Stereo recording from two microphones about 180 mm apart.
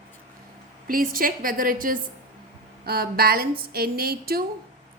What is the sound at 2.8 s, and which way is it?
A woman's voice, 55° right (ahead or behind).